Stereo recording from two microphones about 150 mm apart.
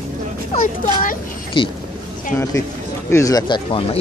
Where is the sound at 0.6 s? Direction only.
65° left (ahead or behind).